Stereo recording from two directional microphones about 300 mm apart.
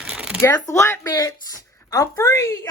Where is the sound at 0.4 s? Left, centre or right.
Centre.